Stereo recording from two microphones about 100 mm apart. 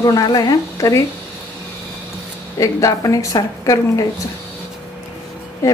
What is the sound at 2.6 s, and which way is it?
Speech, 35° left (ahead or behind).